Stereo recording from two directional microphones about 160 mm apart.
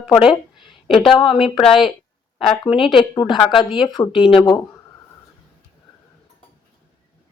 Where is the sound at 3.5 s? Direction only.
Centre (ahead or behind).